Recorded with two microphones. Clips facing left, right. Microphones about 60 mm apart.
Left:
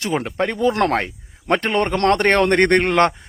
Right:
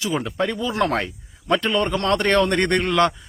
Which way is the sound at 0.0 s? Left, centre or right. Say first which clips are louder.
Left 2 dB; left.